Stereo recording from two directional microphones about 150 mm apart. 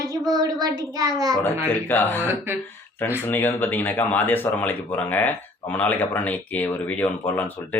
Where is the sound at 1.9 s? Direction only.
15° left (ahead or behind).